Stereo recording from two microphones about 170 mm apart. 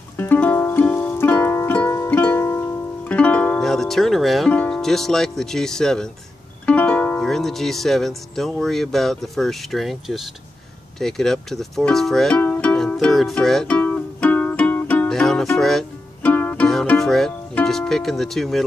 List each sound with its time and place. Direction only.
0.2 s music: 10° left (ahead or behind)
6.6 s speech: 10° left (ahead or behind)
11.0 s music: centre (ahead or behind)